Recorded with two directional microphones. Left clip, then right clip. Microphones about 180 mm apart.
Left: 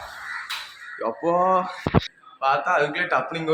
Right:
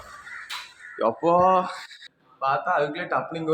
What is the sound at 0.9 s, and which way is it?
Speech, 20° right (ahead or behind).